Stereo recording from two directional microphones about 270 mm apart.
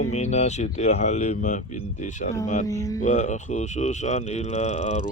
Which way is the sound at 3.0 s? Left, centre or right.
Left.